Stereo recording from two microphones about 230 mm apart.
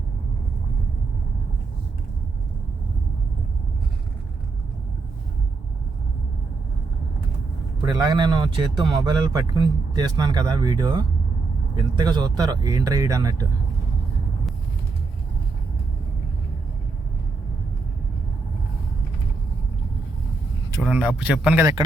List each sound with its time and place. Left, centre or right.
7.8 s speech: centre
20.7 s speech: centre